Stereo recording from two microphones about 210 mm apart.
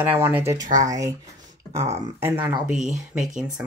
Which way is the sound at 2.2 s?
10° right (ahead or behind).